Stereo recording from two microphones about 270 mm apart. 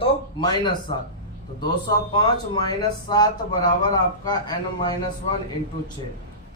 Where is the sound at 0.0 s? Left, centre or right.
Centre.